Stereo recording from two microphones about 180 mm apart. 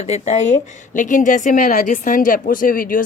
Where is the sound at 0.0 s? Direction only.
40° left (ahead or behind).